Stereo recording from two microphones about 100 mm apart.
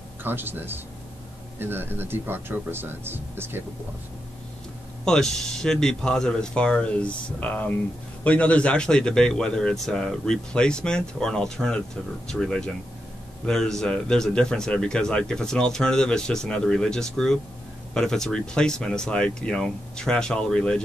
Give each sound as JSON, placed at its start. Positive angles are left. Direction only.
{"t": 0.2, "sound": "speech", "side_deg": -20}
{"t": 5.0, "sound": "a man's voice", "side_deg": 5}